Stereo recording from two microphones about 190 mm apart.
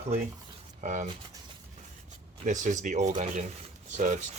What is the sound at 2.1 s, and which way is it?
Speech, 40° right (ahead or behind).